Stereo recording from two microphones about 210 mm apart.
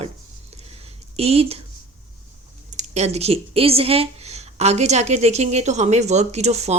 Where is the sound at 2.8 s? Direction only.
30° right (ahead or behind).